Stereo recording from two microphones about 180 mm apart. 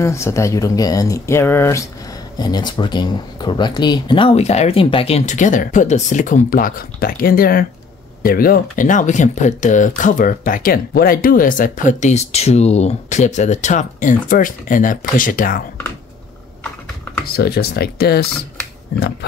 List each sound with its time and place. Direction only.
0.0 s speech: 15° left (ahead or behind); by 15.6 s 50° left (ahead or behind)
17.4 s speech: 60° left (ahead or behind)